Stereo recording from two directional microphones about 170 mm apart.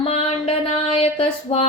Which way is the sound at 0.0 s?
35° left (ahead or behind).